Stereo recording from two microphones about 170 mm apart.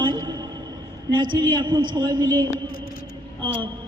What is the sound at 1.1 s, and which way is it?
A man's voice, 25° right (ahead or behind).